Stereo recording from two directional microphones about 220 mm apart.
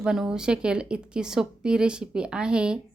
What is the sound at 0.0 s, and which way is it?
Speech, 5° right (ahead or behind).